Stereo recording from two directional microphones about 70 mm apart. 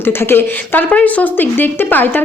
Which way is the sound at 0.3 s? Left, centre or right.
Left.